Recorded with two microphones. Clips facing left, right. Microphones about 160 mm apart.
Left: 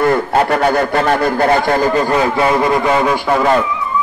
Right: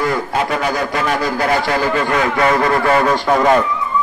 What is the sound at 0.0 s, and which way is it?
A man's voice, 55° left (ahead or behind).